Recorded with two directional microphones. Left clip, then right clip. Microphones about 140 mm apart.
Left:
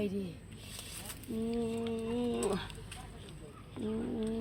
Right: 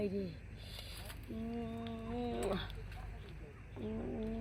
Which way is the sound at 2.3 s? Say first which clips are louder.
Left 1 dB; 30° right (ahead or behind).